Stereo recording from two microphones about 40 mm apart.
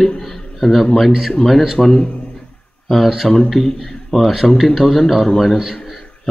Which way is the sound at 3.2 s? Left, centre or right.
Centre.